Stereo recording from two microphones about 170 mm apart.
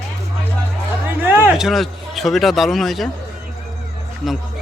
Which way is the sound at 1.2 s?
10° right (ahead or behind).